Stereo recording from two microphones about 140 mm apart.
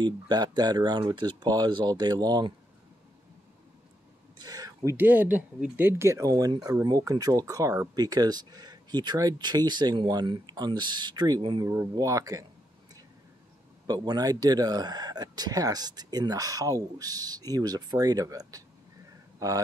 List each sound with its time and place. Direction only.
0.0 s speech: 30° right (ahead or behind)
4.4 s a sound: 25° right (ahead or behind)
4.9 s speech: 15° right (ahead or behind)
13.8 s speech: 30° right (ahead or behind)